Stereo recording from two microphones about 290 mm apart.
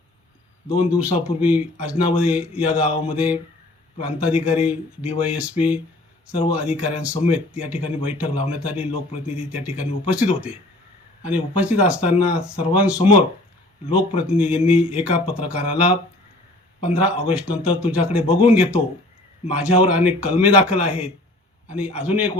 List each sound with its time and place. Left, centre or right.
0.7 s speech: centre
7.9 s a man's voice: centre
8.2 s speech: centre
14.2 s speech: centre
19.8 s speech: centre